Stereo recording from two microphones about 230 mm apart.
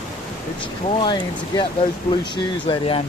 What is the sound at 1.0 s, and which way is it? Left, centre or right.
Speech, centre.